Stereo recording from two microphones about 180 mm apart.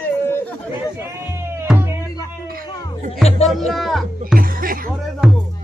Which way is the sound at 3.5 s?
Centre (ahead or behind).